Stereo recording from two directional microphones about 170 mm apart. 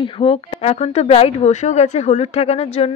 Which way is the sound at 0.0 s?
35° left (ahead or behind).